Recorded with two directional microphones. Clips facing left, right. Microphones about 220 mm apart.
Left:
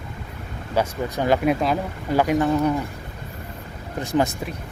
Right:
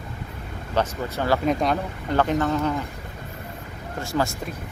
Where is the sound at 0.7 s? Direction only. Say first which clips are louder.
Left 2 dB; 15° left (ahead or behind).